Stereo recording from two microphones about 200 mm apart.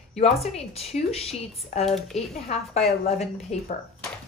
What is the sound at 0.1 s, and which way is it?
A woman's voice, 30° left (ahead or behind).